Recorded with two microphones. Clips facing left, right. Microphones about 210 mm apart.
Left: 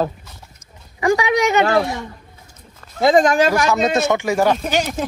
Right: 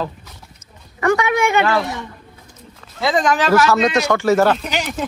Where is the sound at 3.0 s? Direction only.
45° left (ahead or behind).